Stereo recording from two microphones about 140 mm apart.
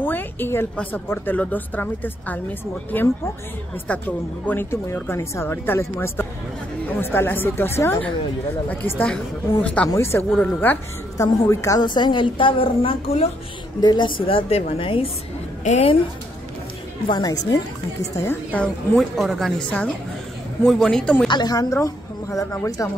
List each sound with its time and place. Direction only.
0.0 s a woman's voice: 15° left (ahead or behind)
4.5 s a woman's voice: 15° left (ahead or behind)
11.8 s a woman's voice: 35° left (ahead or behind)
13.7 s a woman's voice: 30° left (ahead or behind)
17.1 s speech: 30° left (ahead or behind)
18.1 s a woman's voice: 15° left (ahead or behind)
21.3 s speech: 30° left (ahead or behind)